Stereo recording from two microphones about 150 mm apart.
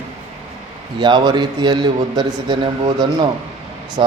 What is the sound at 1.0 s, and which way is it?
A man's voice, 30° right (ahead or behind).